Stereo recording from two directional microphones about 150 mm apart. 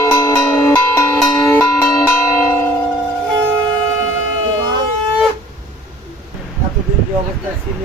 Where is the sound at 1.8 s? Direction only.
15° left (ahead or behind).